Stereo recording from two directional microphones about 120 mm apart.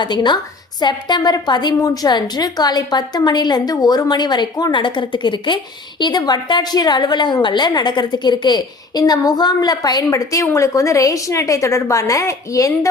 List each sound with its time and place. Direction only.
0.0 s a woman's voice: 40° left (ahead or behind)